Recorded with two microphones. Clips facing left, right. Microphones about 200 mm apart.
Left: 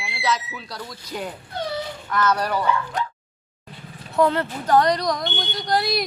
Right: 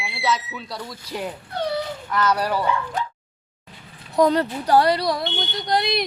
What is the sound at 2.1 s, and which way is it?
Music, 10° right (ahead or behind).